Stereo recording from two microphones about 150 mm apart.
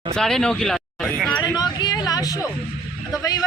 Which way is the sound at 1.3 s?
30° left (ahead or behind).